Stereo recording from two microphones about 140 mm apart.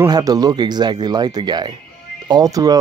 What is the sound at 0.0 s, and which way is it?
Speech, 25° right (ahead or behind).